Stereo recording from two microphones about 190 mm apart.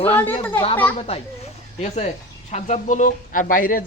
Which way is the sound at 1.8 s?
35° left (ahead or behind).